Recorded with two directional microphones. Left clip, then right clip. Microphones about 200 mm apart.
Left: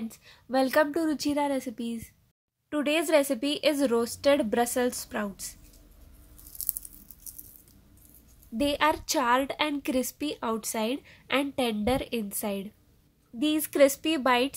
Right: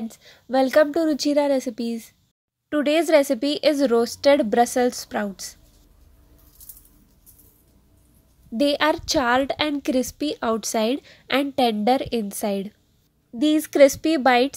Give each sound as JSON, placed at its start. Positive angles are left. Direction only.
{"t": 0.1, "sound": "a woman's voice", "side_deg": -15}
{"t": 8.5, "sound": "a woman's voice", "side_deg": -20}